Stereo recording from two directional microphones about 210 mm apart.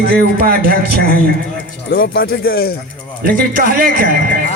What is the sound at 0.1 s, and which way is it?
A man's voice, 45° right (ahead or behind).